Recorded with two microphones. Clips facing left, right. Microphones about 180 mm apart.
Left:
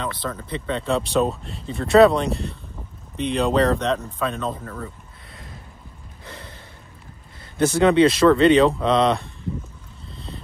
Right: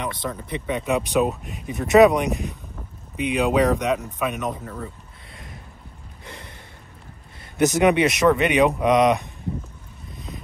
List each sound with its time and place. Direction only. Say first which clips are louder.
0.0 s speech: even; 20° right (ahead or behind)
6.2 s gasp: left 1 dB; 20° right (ahead or behind)
7.5 s speech: left 1 dB; 15° right (ahead or behind)
10.1 s vehicle: even; 15° right (ahead or behind)